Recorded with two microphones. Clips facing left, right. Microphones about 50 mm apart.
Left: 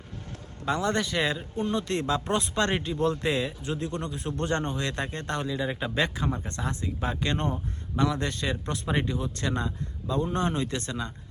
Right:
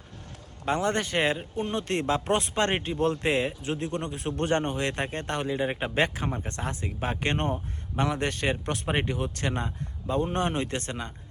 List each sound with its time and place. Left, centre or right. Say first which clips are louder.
0.6 s speech: even; right
4.1 s speech: right 4 dB; right
7.3 s speech: right 1 dB; right
8.6 s speech: right 2 dB; right
8.9 s speech: even; right
9.1 s speech: even; right
9.6 s speech: left 1 dB; right